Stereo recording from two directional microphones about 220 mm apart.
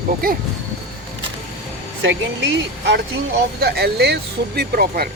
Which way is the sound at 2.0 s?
55° right (ahead or behind).